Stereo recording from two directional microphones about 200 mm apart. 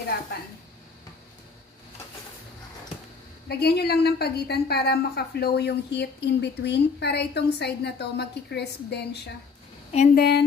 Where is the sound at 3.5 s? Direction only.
55° left (ahead or behind).